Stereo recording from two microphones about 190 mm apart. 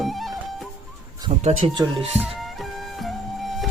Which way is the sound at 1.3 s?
35° right (ahead or behind).